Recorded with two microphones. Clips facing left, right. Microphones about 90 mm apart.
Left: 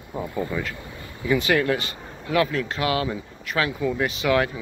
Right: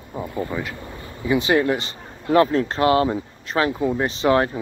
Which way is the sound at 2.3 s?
35° right (ahead or behind).